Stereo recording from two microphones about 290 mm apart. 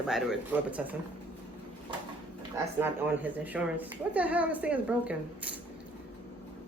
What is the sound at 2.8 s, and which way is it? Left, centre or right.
Speech, centre.